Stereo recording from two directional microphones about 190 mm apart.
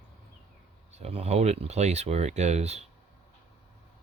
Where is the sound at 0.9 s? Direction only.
35° right (ahead or behind).